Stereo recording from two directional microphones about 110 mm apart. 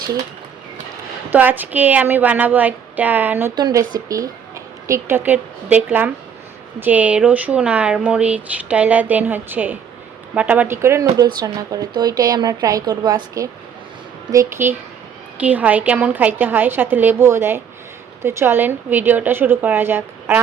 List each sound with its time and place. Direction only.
1.3 s speech: 15° right (ahead or behind)
3.5 s a woman's voice: 35° right (ahead or behind); by 10.7 s 10° right (ahead or behind)
10.7 s speech: 25° right (ahead or behind); by 13.2 s 40° right (ahead or behind)
14.3 s a woman's voice: 25° right (ahead or behind)